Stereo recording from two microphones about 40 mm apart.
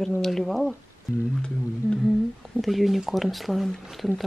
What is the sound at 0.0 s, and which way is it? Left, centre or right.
Speech, centre.